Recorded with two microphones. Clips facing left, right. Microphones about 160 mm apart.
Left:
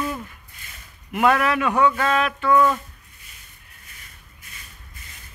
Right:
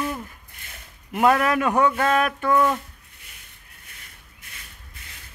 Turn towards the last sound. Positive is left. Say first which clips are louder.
# even
turn(degrees=-65)  # may be behind; listen again after turning